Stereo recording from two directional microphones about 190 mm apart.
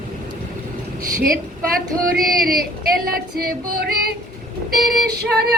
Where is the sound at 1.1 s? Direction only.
50° right (ahead or behind).